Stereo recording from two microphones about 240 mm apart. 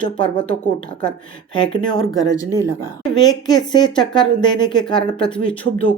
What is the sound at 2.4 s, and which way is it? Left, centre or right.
Speech, centre.